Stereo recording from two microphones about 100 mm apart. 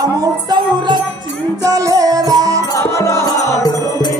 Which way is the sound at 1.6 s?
35° right (ahead or behind).